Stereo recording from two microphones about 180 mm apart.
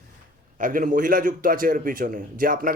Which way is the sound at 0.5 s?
50° right (ahead or behind).